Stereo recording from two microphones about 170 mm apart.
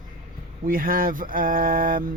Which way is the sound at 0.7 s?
55° right (ahead or behind).